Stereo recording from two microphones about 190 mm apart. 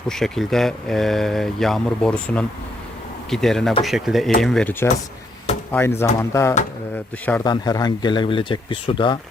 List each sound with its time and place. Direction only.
0.1 s speech: centre (ahead or behind)
7.4 s speech: 20° left (ahead or behind)